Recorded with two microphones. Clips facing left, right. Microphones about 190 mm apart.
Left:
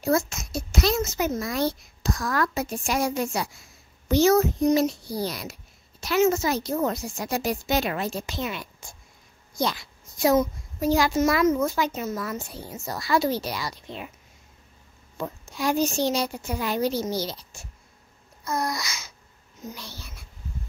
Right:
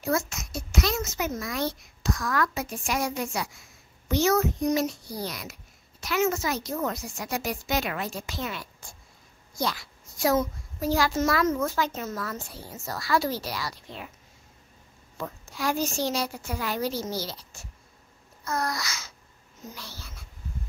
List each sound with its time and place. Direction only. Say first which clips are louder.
0.0 s a child's voice: left 4 dB; 30° left (ahead or behind)
15.1 s a child's voice: left 3 dB; 20° left (ahead or behind)